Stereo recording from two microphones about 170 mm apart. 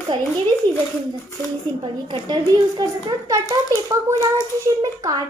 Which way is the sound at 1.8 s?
25° right (ahead or behind).